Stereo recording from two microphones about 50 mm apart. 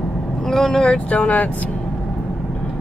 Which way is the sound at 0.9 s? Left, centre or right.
Left.